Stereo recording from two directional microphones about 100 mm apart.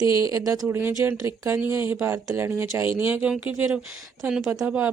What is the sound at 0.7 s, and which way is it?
Speech, 20° right (ahead or behind).